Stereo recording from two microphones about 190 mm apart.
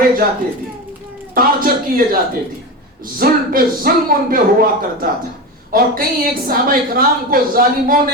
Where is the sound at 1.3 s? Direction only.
50° right (ahead or behind).